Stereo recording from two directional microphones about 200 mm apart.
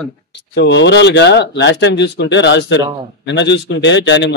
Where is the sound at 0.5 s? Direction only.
60° left (ahead or behind).